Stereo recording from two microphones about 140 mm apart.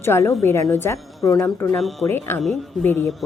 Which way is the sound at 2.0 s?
15° left (ahead or behind).